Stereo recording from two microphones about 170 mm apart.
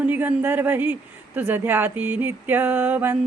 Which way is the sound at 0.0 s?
10° right (ahead or behind).